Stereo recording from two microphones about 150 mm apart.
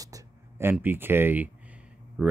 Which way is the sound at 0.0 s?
20° right (ahead or behind).